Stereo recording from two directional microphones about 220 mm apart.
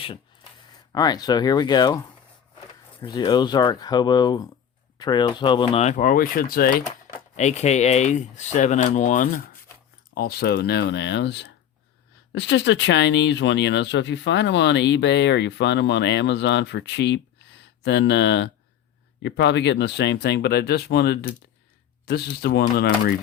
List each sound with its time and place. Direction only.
0.9 s speech: 20° left (ahead or behind)
3.0 s speech: 20° left (ahead or behind); by 23.1 s 45° left (ahead or behind)